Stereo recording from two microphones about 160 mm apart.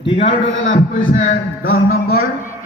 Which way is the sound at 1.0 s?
55° left (ahead or behind).